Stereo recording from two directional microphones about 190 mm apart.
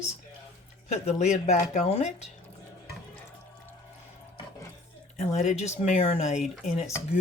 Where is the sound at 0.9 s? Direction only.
35° left (ahead or behind).